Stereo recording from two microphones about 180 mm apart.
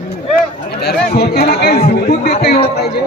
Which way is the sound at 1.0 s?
60° left (ahead or behind).